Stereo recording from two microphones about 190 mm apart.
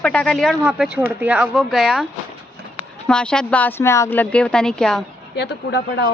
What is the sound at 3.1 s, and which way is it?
Speech, 5° left (ahead or behind).